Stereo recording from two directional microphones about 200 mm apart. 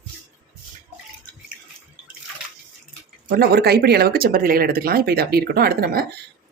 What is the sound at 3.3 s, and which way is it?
Speech, 50° right (ahead or behind).